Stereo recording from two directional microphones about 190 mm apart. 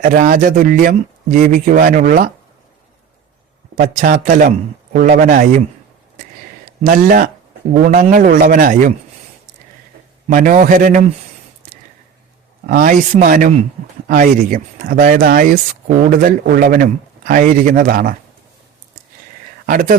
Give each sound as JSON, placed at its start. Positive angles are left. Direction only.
{"t": 0.0, "sound": "speech", "side_deg": -45}
{"t": 3.8, "sound": "speech", "side_deg": -45}
{"t": 6.8, "sound": "speech", "side_deg": -45}
{"t": 10.2, "sound": "speech", "side_deg": -45}
{"t": 12.6, "sound": "speech", "side_deg": -45}
{"t": 19.6, "sound": "speech", "side_deg": -45}